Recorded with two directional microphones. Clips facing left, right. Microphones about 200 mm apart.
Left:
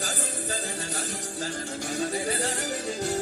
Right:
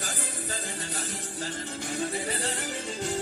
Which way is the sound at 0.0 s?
40° left (ahead or behind).